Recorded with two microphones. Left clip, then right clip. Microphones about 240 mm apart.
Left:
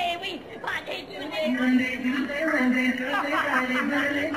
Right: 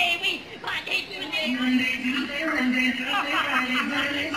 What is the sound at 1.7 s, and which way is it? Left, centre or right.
Speech, left.